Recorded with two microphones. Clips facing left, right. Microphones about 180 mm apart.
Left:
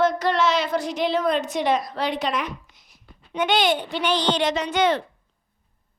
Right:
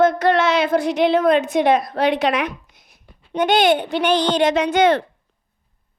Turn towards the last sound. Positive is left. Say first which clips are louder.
# right 5 dB
turn(degrees=-55)  # may be behind; listen again after turning